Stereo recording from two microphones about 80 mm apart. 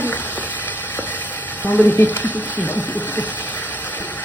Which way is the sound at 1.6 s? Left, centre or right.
Left.